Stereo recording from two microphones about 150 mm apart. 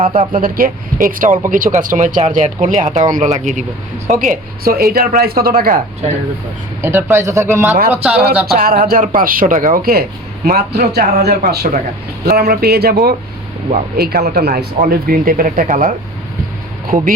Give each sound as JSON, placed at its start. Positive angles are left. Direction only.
{"t": 0.3, "sound": "speech", "side_deg": -70}
{"t": 6.8, "sound": "speech", "side_deg": -15}
{"t": 8.5, "sound": "speech", "side_deg": -75}
{"t": 12.2, "sound": "speech", "side_deg": -90}